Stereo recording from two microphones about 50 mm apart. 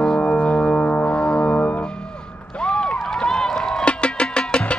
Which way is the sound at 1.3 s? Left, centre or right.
Left.